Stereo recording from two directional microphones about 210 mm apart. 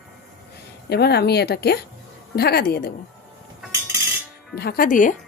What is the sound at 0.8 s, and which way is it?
Speech, 50° left (ahead or behind).